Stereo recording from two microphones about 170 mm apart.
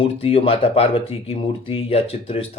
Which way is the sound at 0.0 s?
35° left (ahead or behind).